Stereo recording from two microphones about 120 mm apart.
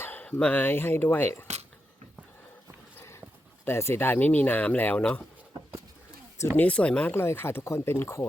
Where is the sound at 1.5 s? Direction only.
70° right (ahead or behind).